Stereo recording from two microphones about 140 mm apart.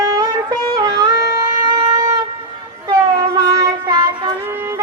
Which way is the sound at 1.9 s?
25° right (ahead or behind).